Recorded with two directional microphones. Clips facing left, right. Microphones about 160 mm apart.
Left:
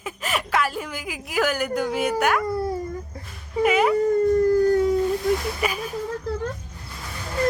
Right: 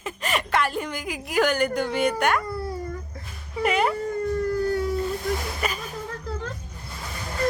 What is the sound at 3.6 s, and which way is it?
Speech, 5° left (ahead or behind).